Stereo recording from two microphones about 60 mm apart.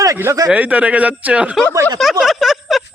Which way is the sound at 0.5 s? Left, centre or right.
Right.